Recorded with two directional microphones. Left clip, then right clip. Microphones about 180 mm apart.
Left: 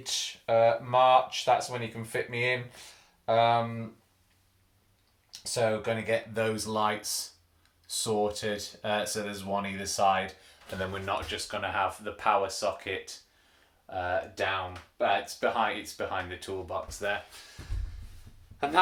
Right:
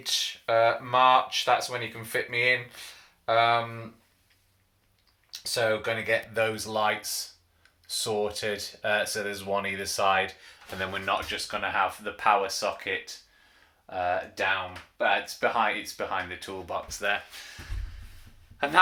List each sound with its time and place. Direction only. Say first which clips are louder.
0.0 s speech: right 4 dB; 5° left (ahead or behind)
5.4 s speech: right 2 dB; 5° left (ahead or behind); by 10.3 s 10° right (ahead or behind)
10.8 s speech: right 4 dB; 20° right (ahead or behind)